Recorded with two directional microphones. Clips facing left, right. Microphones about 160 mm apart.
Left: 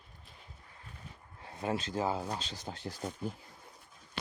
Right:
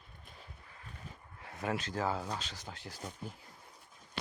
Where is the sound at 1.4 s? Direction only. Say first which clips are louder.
Left 2 dB; 25° left (ahead or behind).